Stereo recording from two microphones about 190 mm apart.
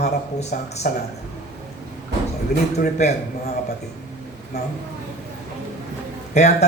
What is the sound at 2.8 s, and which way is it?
Speech, 35° left (ahead or behind).